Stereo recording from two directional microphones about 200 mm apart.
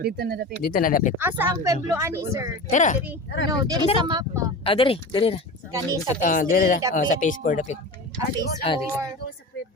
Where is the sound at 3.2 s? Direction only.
60° left (ahead or behind).